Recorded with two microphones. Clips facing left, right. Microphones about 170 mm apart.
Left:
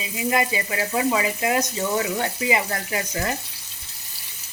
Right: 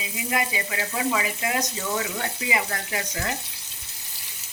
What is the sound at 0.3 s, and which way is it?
Speech, 30° left (ahead or behind).